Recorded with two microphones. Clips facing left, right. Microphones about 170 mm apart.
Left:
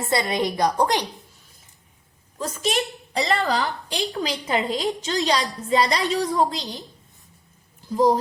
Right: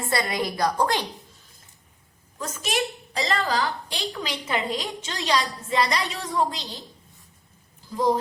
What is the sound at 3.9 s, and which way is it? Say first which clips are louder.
A woman's voice: left 5 dB; 35° left (ahead or behind).